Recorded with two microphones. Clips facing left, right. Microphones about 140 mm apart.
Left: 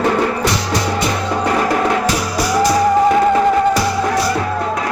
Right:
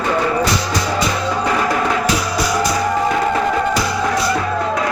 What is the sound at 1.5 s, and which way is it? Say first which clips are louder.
Music: left 3 dB; 40° left (ahead or behind).